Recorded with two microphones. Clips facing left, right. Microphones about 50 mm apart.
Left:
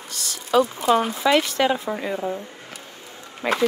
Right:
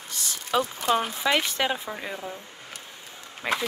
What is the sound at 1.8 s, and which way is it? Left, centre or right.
Speech, left.